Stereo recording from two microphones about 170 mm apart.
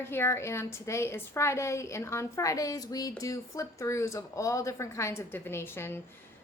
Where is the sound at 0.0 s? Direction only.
15° left (ahead or behind).